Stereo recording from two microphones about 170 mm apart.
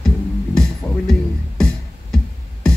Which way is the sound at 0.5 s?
5° left (ahead or behind).